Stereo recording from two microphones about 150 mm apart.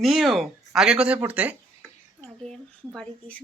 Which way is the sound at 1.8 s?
10° left (ahead or behind).